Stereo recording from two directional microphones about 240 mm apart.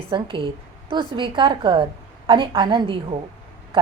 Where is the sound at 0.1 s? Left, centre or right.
Right.